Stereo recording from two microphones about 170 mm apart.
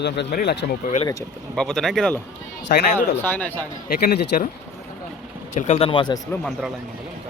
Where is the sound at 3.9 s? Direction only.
70° left (ahead or behind).